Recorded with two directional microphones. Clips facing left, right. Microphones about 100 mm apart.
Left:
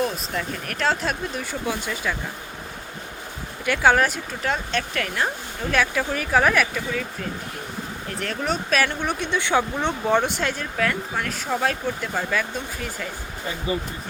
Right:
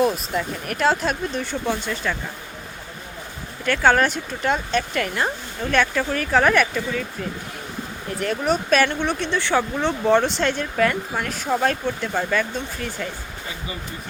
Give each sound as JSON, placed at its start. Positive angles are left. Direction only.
{"t": 0.0, "sound": "speech", "side_deg": -5}
{"t": 3.7, "sound": "speech", "side_deg": 5}
{"t": 8.2, "sound": "speech", "side_deg": -5}
{"t": 13.7, "sound": "speech", "side_deg": 35}